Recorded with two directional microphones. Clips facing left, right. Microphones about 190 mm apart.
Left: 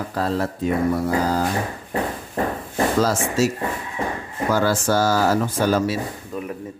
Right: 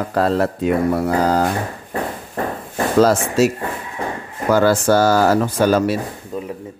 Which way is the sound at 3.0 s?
65° right (ahead or behind).